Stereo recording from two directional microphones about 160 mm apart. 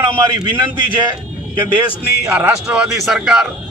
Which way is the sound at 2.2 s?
15° right (ahead or behind).